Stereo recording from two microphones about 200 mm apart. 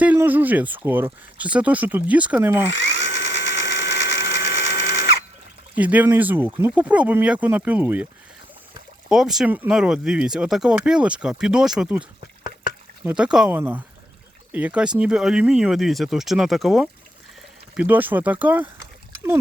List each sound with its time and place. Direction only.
0.0 s speech: 10° right (ahead or behind)
3.0 s drill: 35° right (ahead or behind)
3.4 s sewing machine: 15° right (ahead or behind)
5.7 s speech: 10° right (ahead or behind)
9.0 s speech: centre (ahead or behind)
13.1 s speech: 5° right (ahead or behind)